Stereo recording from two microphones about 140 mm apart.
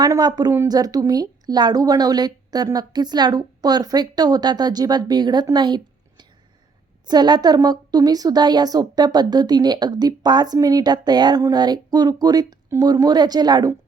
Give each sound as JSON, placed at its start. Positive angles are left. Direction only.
{"t": 0.0, "sound": "a woman's voice", "side_deg": -30}